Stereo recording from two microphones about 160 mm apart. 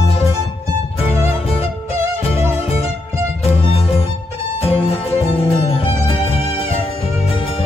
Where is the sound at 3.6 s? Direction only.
35° left (ahead or behind).